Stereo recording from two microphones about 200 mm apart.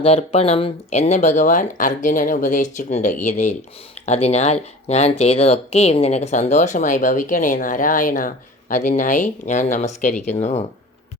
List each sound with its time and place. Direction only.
0.0 s speech: 30° left (ahead or behind)